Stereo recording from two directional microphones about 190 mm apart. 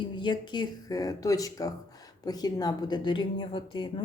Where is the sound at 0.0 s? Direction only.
25° left (ahead or behind).